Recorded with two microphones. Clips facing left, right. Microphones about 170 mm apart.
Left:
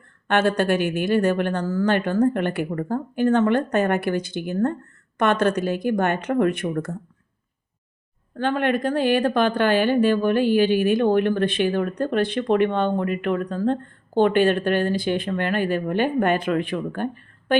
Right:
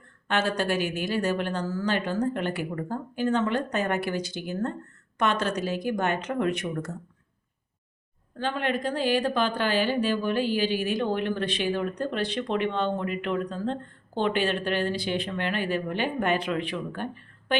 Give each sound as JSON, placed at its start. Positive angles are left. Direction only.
{"t": 0.3, "sound": "speech", "side_deg": 60}
{"t": 8.4, "sound": "a woman's voice", "side_deg": 55}